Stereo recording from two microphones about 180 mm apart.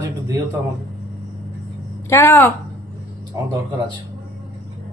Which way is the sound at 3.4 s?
20° right (ahead or behind).